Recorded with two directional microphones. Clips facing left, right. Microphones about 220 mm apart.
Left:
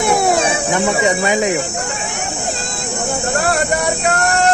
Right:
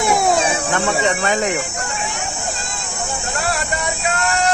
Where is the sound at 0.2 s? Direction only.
Centre (ahead or behind).